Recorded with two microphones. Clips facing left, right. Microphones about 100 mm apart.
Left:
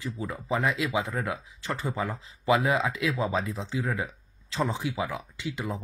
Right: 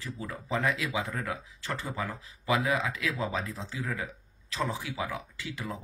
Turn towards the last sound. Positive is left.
turn(degrees=20)  # may be behind; listen again after turning